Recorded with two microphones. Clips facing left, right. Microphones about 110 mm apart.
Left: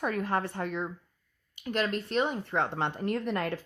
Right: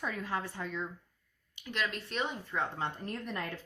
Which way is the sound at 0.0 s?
55° left (ahead or behind).